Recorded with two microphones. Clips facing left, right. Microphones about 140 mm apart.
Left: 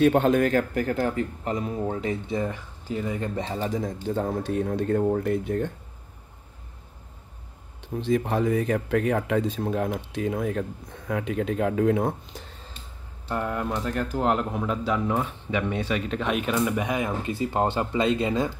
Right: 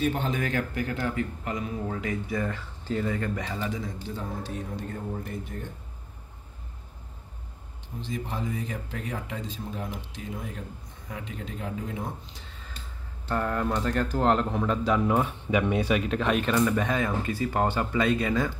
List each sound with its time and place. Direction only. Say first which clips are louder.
0.0 s a man's voice: left 9 dB; 65° left (ahead or behind); by 2.6 s 20° left (ahead or behind)
2.9 s speech: even; 10° left (ahead or behind)
3.2 s a man's voice: left 3 dB; 30° left (ahead or behind)
4.2 s speech: left 10 dB; 55° left (ahead or behind)
8.0 s speech: left 10 dB; 65° left (ahead or behind)
13.3 s speech: even; 10° left (ahead or behind)
14.9 s speech: right 2 dB; 10° right (ahead or behind); by 18.5 s 20° left (ahead or behind)